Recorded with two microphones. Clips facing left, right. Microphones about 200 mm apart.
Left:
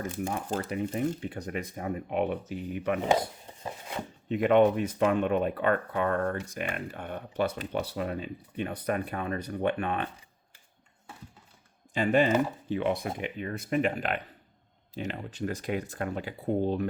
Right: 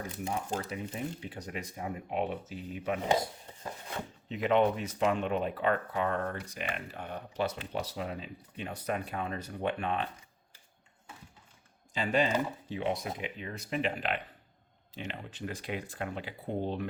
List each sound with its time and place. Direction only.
0.0 s speech: 50° left (ahead or behind)
4.3 s speech: 55° left (ahead or behind)
11.9 s speech: 55° left (ahead or behind)